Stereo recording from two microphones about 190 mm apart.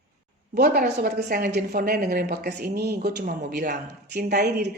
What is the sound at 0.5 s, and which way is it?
A woman's voice, 50° right (ahead or behind).